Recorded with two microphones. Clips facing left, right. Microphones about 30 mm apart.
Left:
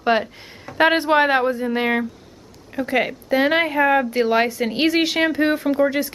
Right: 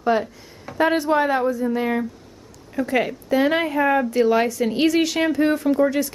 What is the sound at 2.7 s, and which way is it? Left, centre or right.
Speech, left.